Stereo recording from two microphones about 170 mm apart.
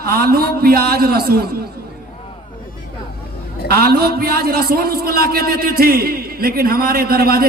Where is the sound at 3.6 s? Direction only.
65° right (ahead or behind).